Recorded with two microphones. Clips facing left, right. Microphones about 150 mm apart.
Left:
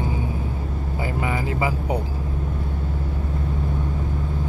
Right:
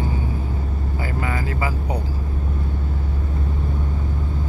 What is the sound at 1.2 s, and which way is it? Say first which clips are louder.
Speech: left 2 dB; 20° left (ahead or behind).